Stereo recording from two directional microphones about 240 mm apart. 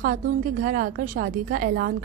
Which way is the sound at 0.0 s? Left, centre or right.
Right.